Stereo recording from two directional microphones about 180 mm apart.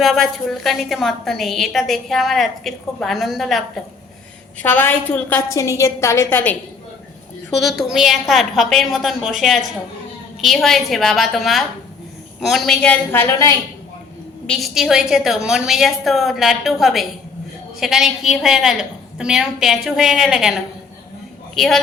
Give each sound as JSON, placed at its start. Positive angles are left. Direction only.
{"t": 0.0, "sound": "a woman's voice", "side_deg": 0}
{"t": 4.6, "sound": "a woman's voice", "side_deg": 10}
{"t": 7.6, "sound": "a woman's voice", "side_deg": 0}
{"t": 14.4, "sound": "a woman's voice", "side_deg": 0}